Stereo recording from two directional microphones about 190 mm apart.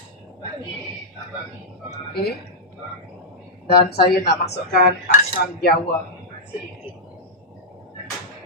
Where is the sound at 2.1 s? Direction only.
55° left (ahead or behind).